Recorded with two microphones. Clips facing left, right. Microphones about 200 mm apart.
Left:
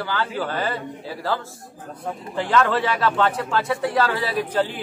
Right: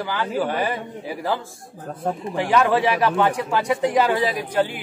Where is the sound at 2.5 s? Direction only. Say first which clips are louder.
Right 2 dB; 15° right (ahead or behind).